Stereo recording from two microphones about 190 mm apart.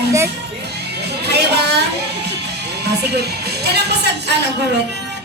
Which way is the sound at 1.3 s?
60° right (ahead or behind).